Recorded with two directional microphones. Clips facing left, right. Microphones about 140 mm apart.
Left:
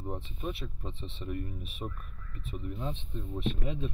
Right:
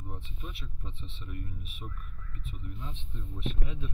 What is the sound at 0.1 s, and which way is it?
Speech, 35° left (ahead or behind).